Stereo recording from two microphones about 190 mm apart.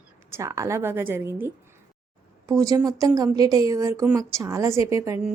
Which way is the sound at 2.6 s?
20° right (ahead or behind).